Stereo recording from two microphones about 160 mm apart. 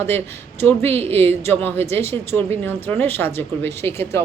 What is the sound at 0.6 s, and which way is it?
Speech, 15° left (ahead or behind).